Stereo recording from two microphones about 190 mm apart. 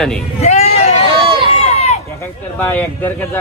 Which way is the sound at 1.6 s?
35° left (ahead or behind).